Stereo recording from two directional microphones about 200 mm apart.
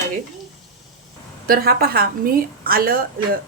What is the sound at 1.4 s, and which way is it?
A woman's voice, 50° right (ahead or behind).